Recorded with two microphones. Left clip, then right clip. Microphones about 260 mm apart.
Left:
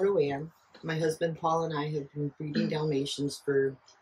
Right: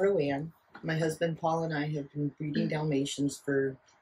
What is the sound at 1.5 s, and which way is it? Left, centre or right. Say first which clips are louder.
Speech: left 2 dB; centre.